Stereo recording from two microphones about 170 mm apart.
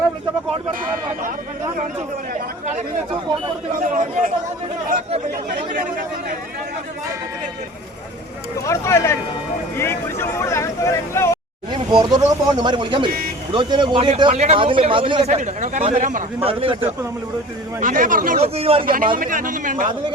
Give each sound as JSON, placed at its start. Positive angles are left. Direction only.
{"t": 3.8, "sound": "speech", "side_deg": -55}
{"t": 8.5, "sound": "speech", "side_deg": 15}
{"t": 11.7, "sound": "a man's voice", "side_deg": -25}
{"t": 16.4, "sound": "a man's voice", "side_deg": -35}
{"t": 17.7, "sound": "a man's voice", "side_deg": -50}
{"t": 18.3, "sound": "a man's voice", "side_deg": -35}
{"t": 19.1, "sound": "a man's voice", "side_deg": -55}